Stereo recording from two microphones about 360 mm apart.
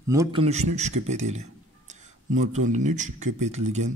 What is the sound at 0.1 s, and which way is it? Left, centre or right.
A man's voice, centre.